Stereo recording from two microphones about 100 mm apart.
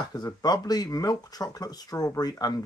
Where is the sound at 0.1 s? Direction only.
40° left (ahead or behind).